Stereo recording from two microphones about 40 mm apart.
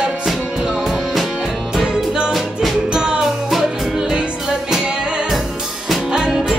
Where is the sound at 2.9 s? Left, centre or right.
Centre.